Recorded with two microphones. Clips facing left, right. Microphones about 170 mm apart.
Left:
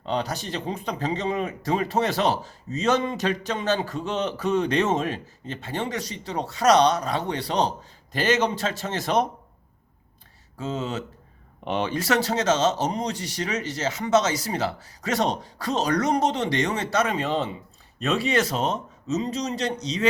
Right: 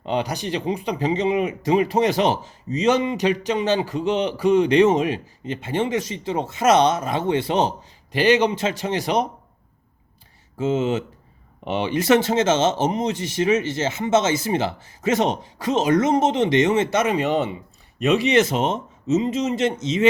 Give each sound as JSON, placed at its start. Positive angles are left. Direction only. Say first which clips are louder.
{"t": 0.0, "sound": "speech", "louder": "right 3 dB", "side_deg": -10}
{"t": 8.1, "sound": "speech", "louder": "right 5 dB", "side_deg": -15}
{"t": 10.6, "sound": "speech", "louder": "right 8 dB", "side_deg": -20}
{"t": 11.6, "sound": "speech", "louder": "right 2 dB", "side_deg": -10}
{"t": 11.9, "sound": "speech", "louder": "right 9 dB", "side_deg": -20}